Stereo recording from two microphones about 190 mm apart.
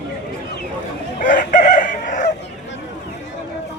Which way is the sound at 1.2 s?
45° left (ahead or behind).